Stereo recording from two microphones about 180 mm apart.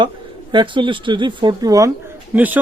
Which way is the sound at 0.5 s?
25° right (ahead or behind).